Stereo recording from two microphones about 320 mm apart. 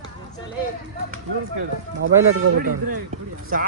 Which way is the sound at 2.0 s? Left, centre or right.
Right.